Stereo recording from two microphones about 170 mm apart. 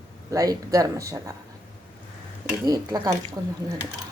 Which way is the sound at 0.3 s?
20° right (ahead or behind).